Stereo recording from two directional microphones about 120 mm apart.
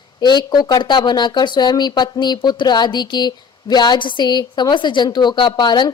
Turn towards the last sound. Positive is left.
turn(degrees=40)  # may be behind; listen again after turning